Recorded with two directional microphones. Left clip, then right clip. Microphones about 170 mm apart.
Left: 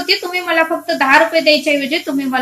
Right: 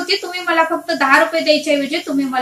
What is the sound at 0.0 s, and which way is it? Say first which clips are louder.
A woman's voice: left 3 dB; 25° left (ahead or behind).